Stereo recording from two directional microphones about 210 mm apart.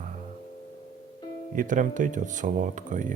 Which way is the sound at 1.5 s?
40° right (ahead or behind).